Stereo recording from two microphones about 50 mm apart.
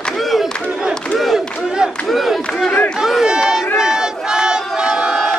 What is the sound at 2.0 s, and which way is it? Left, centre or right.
Crowd, centre.